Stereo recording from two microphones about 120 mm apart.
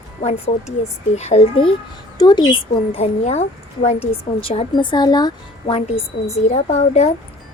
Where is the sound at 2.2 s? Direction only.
35° left (ahead or behind).